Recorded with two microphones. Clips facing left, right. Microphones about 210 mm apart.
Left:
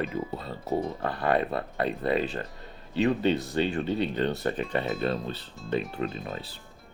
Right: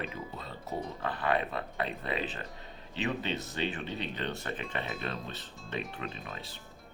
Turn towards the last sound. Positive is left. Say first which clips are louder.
# left 8 dB
turn(degrees=40)  # may be behind; listen again after turning